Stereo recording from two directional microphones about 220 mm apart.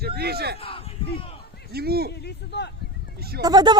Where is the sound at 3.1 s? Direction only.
45° right (ahead or behind).